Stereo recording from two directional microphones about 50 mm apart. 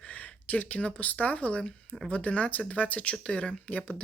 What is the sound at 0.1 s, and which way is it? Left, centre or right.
Speech, left.